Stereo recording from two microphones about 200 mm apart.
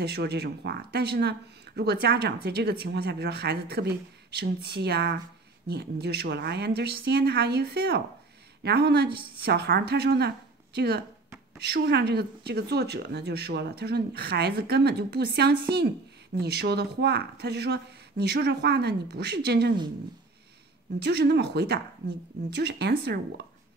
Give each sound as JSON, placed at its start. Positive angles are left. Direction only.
{"t": 0.0, "sound": "speech", "side_deg": -55}
{"t": 21.0, "sound": "speech", "side_deg": -60}